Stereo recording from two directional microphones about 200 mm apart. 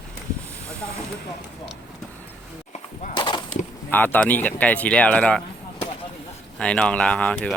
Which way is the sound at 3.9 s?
10° left (ahead or behind).